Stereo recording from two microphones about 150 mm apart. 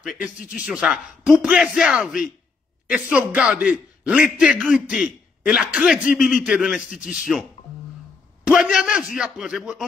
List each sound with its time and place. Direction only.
0.0 s a man's voice: centre (ahead or behind)
0.4 s a man's voice: 65° left (ahead or behind)
0.7 s a man's voice: 5° right (ahead or behind)
8.5 s a man's voice: 5° right (ahead or behind)